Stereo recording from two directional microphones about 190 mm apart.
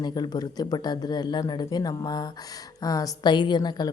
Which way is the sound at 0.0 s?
20° left (ahead or behind).